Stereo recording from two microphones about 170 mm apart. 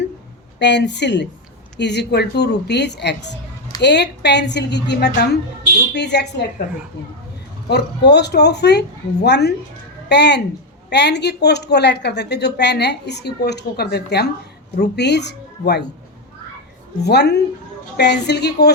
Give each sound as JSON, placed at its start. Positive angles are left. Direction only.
{"t": 0.6, "sound": "speech", "side_deg": 90}
{"t": 7.7, "sound": "a woman's voice", "side_deg": 80}
{"t": 17.0, "sound": "a woman's voice", "side_deg": 75}